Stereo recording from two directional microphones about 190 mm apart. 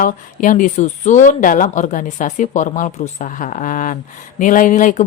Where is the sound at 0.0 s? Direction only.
45° left (ahead or behind).